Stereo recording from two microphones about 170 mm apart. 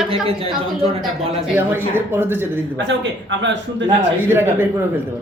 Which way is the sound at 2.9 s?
90° right.